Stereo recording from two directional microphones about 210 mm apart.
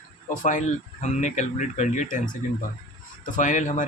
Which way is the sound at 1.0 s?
35° left (ahead or behind).